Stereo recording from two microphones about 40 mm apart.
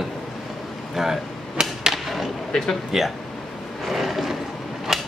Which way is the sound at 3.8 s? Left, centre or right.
Centre.